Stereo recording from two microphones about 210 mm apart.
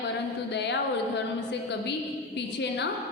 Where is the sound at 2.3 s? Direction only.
55° left (ahead or behind).